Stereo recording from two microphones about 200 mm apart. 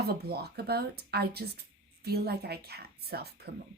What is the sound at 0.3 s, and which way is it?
Speech, 50° right (ahead or behind).